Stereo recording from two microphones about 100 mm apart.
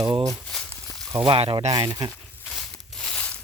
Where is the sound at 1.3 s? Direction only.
80° right.